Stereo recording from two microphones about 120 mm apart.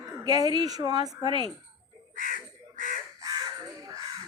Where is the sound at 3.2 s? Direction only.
30° right (ahead or behind).